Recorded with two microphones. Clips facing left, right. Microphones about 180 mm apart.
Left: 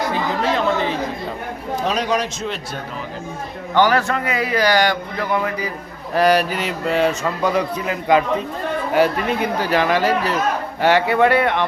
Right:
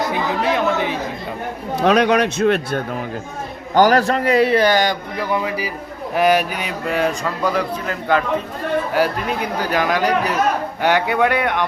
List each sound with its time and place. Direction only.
0.1 s speech: 10° right (ahead or behind)
1.8 s a man's voice: 65° right (ahead or behind)
3.8 s a man's voice: 40° right (ahead or behind); by 5.7 s 10° right (ahead or behind)
6.1 s speech: centre (ahead or behind)